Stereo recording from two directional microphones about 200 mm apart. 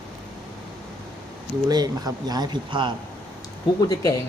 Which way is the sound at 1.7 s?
20° right (ahead or behind).